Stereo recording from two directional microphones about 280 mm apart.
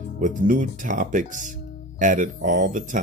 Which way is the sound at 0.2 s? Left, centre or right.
Right.